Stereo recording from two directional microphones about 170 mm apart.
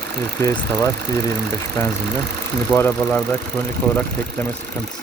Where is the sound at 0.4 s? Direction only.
15° left (ahead or behind).